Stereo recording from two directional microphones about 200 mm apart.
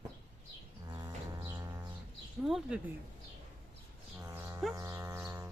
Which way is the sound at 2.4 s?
5° right (ahead or behind).